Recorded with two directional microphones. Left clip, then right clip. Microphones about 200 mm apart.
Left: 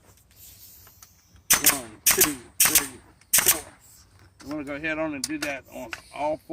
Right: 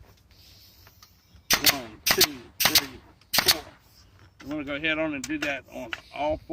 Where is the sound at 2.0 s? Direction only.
20° left (ahead or behind).